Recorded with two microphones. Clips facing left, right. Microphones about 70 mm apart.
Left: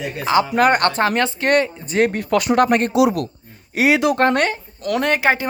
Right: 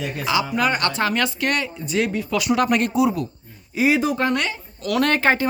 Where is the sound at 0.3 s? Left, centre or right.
Left.